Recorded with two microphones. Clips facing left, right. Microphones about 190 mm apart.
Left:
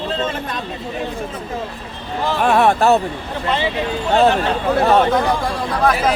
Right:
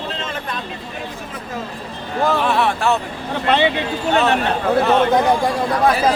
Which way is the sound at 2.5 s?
45° left (ahead or behind).